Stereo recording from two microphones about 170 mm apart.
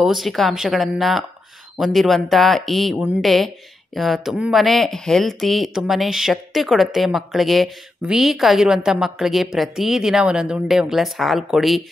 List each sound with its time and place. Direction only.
0.0 s speech: centre (ahead or behind)